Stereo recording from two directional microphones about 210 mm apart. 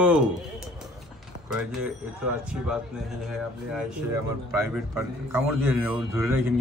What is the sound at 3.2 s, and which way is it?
A man's voice, centre (ahead or behind).